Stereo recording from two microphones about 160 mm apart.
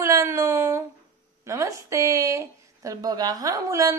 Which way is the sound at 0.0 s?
15° right (ahead or behind).